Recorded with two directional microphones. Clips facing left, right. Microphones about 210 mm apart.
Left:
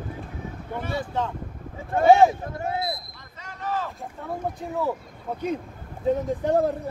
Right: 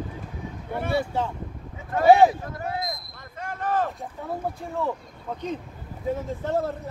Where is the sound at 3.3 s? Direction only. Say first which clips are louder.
Right 4 dB; 50° right (ahead or behind).